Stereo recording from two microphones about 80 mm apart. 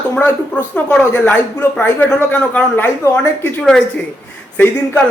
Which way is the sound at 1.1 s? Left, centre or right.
Left.